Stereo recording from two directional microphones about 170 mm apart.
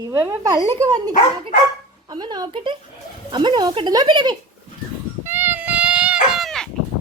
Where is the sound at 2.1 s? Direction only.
25° right (ahead or behind).